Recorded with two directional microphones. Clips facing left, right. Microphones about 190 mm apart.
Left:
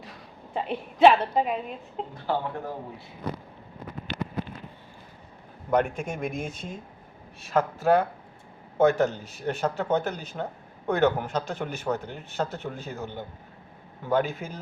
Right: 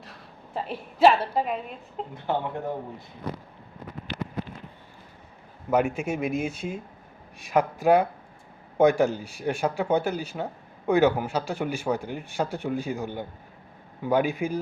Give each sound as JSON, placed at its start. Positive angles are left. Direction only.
{"t": 0.0, "sound": "a woman's voice", "side_deg": 0}
{"t": 2.1, "sound": "speech", "side_deg": -20}
{"t": 5.7, "sound": "speech", "side_deg": -5}